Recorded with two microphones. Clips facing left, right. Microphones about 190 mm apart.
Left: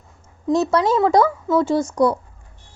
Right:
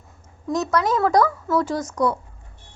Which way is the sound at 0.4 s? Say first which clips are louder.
Left 4 dB; 30° left (ahead or behind).